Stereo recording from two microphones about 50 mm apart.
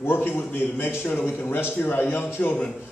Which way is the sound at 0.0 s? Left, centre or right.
Left.